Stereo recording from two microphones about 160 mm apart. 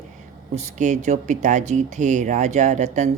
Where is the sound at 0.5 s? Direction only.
45° right (ahead or behind).